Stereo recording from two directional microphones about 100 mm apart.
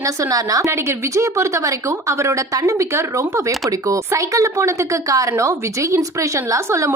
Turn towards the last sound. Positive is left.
turn(degrees=-30)  # may be behind; listen again after turning